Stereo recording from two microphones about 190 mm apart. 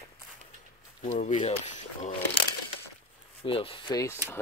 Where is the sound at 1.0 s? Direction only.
40° left (ahead or behind).